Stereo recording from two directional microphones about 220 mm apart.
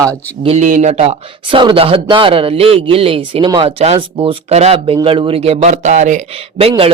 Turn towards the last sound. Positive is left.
turn(degrees=-30)  # may be behind; listen again after turning